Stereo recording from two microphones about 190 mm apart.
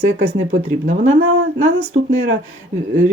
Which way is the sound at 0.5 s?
75° right (ahead or behind).